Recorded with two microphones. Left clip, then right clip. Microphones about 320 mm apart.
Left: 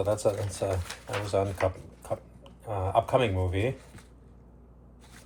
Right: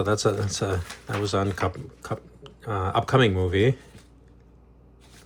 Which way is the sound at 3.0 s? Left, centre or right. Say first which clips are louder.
Right 4 dB; right.